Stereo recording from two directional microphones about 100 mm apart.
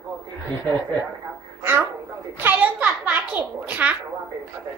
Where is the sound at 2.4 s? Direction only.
15° right (ahead or behind).